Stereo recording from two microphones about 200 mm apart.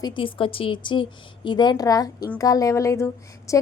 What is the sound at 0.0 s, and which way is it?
A woman's voice, 25° left (ahead or behind).